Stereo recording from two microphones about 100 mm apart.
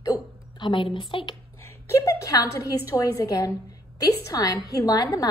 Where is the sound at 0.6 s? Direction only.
55° left (ahead or behind).